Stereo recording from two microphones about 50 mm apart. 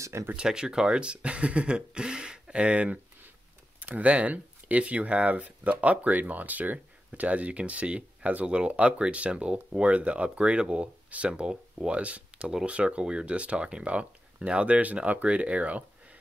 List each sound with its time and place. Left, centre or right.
0.0 s speech: right
0.3 s speech: centre